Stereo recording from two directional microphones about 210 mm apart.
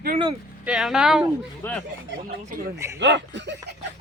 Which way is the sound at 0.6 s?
5° right (ahead or behind).